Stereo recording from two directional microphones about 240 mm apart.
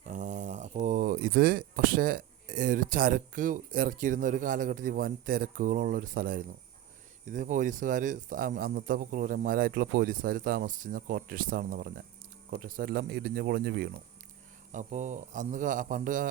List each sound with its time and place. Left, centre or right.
0.1 s a man's voice: right
14.7 s a man's voice: right